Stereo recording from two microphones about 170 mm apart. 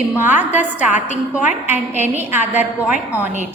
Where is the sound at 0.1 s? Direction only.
10° right (ahead or behind).